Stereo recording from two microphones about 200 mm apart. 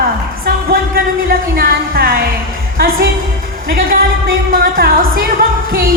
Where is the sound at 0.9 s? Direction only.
45° right (ahead or behind).